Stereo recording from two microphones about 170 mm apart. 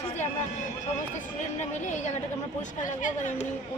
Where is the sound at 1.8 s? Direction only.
45° left (ahead or behind).